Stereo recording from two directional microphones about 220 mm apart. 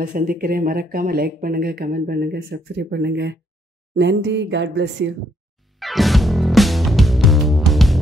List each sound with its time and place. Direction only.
0.0 s speech: 35° right (ahead or behind); by 5.1 s 55° right (ahead or behind)
5.8 s music: centre (ahead or behind)